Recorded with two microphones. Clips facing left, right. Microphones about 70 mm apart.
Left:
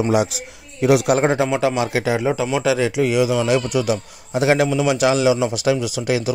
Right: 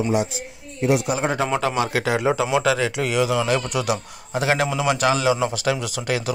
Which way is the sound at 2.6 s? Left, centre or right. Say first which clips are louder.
Left 3 dB; centre.